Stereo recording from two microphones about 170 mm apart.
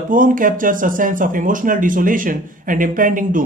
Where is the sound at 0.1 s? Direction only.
50° right (ahead or behind).